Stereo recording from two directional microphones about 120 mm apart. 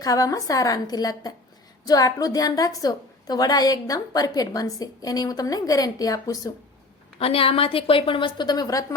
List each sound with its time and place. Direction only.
0.0 s a woman's voice: 30° left (ahead or behind)
7.2 s a woman's voice: 50° left (ahead or behind); by 9.0 s 30° left (ahead or behind)